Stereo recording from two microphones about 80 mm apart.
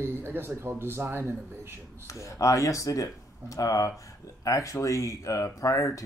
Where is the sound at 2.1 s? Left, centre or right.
Left.